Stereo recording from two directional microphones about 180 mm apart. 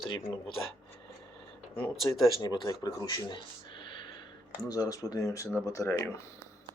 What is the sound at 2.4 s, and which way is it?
Speech, 25° left (ahead or behind).